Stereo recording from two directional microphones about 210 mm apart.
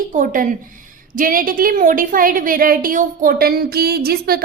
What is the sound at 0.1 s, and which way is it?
A woman's voice, 40° right (ahead or behind).